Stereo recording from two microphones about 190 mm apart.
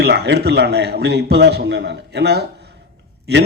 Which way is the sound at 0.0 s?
60° right (ahead or behind).